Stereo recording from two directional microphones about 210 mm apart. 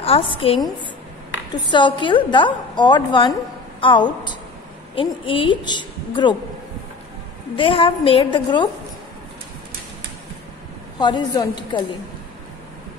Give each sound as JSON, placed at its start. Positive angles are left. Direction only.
{"t": 0.0, "sound": "a woman's voice", "side_deg": 25}
{"t": 1.7, "sound": "a woman's voice", "side_deg": 20}
{"t": 7.5, "sound": "a woman's voice", "side_deg": 25}
{"t": 11.0, "sound": "a woman's voice", "side_deg": 20}